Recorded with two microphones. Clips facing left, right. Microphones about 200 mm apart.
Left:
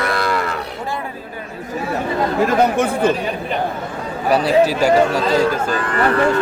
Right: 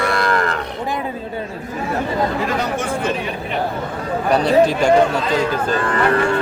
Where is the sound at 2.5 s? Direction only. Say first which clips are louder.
Left 5 dB; 60° left (ahead or behind).